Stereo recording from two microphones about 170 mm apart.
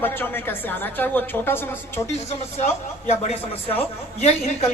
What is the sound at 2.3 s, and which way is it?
A woman's voice, 40° left (ahead or behind).